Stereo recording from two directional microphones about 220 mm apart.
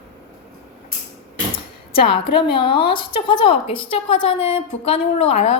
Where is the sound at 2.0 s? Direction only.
20° left (ahead or behind).